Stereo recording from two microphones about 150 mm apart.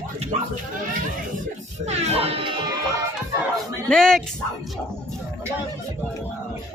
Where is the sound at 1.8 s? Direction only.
45° right (ahead or behind).